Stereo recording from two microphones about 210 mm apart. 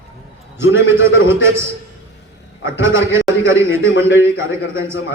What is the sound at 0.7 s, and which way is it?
Speech, 65° left (ahead or behind).